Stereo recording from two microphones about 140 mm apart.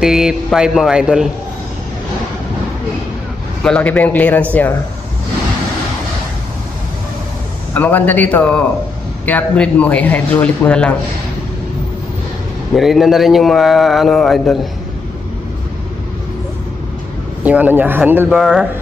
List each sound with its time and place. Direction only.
0.0 s a man's voice: 5° right (ahead or behind)
3.6 s a man's voice: 10° left (ahead or behind)
7.7 s a man's voice: 10° left (ahead or behind)
12.7 s a man's voice: centre (ahead or behind)
17.4 s speech: 10° right (ahead or behind)
18.4 s a man's voice: centre (ahead or behind)